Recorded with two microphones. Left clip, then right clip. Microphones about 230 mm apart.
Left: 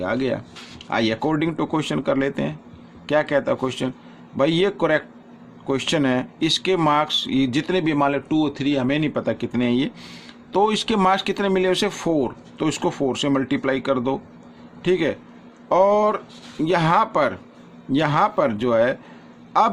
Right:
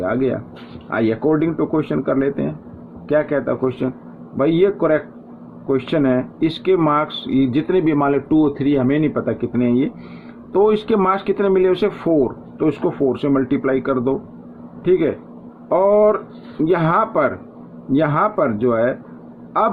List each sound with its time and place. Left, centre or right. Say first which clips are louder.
0.0 s speech: right 4 dB; left